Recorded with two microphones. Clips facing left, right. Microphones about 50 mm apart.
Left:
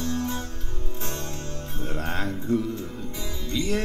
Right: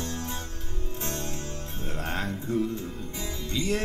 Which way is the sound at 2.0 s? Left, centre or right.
Centre.